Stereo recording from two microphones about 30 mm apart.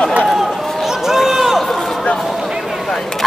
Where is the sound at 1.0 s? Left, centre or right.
Centre.